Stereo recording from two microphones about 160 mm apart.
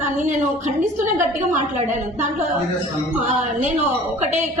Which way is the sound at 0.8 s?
50° right (ahead or behind).